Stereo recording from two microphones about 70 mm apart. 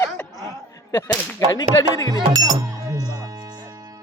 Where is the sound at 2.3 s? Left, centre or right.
Right.